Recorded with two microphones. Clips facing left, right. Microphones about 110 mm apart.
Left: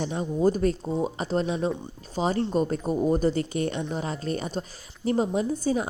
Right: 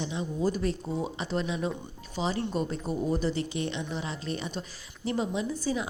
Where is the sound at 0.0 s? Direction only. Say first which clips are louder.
Left 6 dB; 45° left (ahead or behind).